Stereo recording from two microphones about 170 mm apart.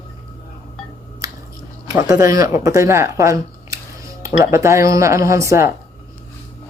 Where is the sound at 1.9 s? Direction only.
20° right (ahead or behind).